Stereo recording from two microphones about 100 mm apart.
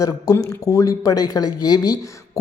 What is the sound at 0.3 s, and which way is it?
Speech, 35° left (ahead or behind).